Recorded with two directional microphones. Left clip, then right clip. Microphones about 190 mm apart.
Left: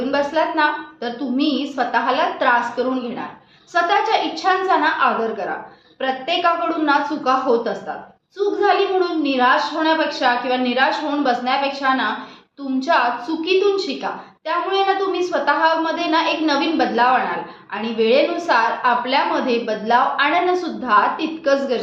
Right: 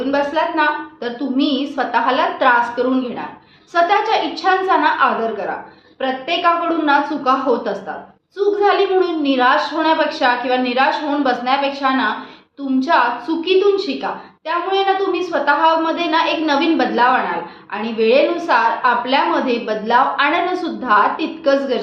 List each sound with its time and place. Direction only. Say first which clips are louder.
0.1 s a woman's voice: right 2 dB; 5° right (ahead or behind)